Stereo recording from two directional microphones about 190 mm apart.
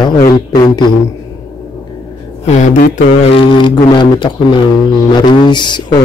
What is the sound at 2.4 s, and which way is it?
Mantra, 40° left (ahead or behind).